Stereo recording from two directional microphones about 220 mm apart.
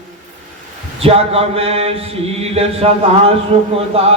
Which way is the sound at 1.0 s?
25° right (ahead or behind).